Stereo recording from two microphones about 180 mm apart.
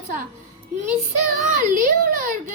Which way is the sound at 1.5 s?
45° right (ahead or behind).